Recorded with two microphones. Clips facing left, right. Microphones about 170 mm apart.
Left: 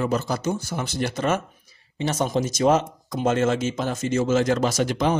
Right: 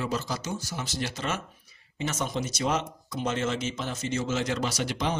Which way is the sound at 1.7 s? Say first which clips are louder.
Left 6 dB; 35° left (ahead or behind).